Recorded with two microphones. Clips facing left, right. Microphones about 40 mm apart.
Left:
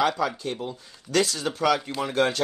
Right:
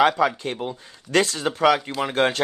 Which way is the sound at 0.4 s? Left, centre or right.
Right.